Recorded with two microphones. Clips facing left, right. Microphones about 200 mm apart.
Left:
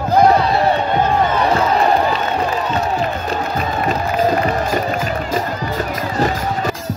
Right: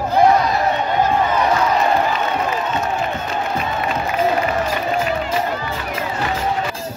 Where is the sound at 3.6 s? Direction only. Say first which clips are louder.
Left 3 dB; 40° left (ahead or behind).